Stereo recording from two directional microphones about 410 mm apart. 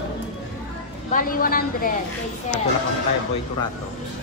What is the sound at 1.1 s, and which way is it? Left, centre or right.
Speech, centre.